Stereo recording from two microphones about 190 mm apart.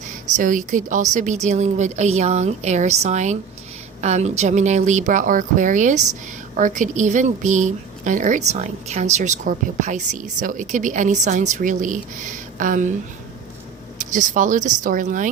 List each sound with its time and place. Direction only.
0.3 s a woman's voice: 40° right (ahead or behind)
14.1 s speech: 40° right (ahead or behind)